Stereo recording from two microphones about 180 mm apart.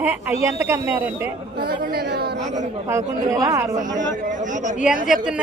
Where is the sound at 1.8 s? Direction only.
60° right (ahead or behind).